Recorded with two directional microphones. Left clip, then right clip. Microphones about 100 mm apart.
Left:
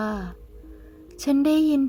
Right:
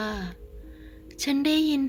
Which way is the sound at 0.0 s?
60° left (ahead or behind).